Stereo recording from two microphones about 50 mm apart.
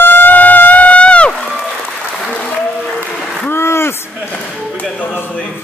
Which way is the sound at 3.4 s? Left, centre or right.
Left.